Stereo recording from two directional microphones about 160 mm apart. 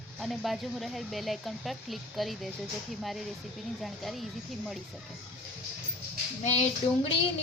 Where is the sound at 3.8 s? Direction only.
Centre (ahead or behind).